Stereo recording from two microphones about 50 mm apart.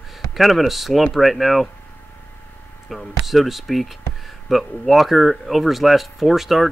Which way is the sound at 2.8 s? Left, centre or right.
Centre.